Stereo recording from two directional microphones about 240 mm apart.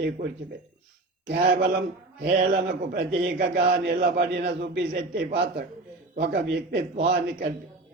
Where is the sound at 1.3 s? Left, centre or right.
Right.